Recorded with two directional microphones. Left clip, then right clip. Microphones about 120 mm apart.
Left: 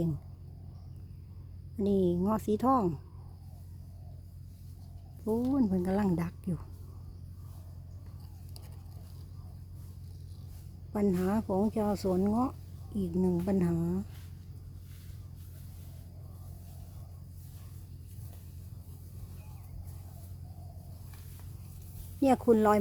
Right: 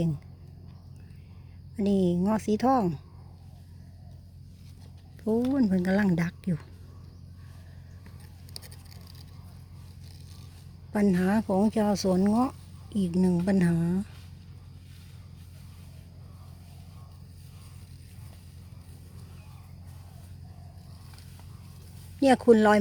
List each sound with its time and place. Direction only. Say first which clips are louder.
1.7 s a woman's voice: right 2 dB; centre (ahead or behind)
5.2 s speech: right 4 dB; 20° right (ahead or behind)
5.7 s a woman's voice: right 4 dB; 5° right (ahead or behind)
10.9 s speech: right 4 dB; 15° right (ahead or behind)
13.1 s a woman's voice: right 3 dB; 5° right (ahead or behind)
22.2 s speech: right 5 dB; 15° right (ahead or behind)